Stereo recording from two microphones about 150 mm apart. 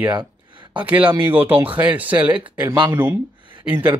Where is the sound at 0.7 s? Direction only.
10° right (ahead or behind).